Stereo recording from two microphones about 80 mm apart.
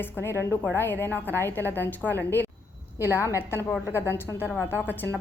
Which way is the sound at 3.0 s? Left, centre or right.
Left.